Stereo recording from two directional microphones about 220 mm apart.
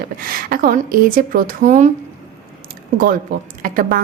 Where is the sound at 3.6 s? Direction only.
40° right (ahead or behind).